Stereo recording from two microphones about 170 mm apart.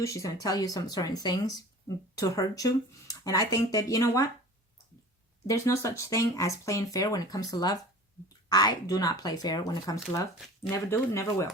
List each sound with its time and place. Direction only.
0.0 s speech: 20° left (ahead or behind)
5.5 s speech: 15° left (ahead or behind)